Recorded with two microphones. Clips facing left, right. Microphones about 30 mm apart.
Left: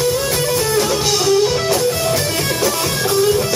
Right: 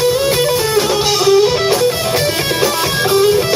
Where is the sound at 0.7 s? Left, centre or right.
Right.